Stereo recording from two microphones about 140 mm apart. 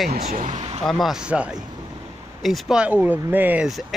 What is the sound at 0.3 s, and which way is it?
Speech, 60° right (ahead or behind).